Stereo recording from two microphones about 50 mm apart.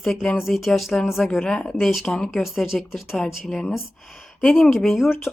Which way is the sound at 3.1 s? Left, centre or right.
Centre.